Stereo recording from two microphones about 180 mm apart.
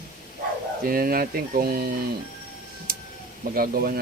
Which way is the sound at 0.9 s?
55° right (ahead or behind).